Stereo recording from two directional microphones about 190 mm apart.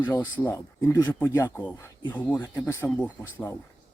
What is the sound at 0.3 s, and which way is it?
Speech, 15° left (ahead or behind).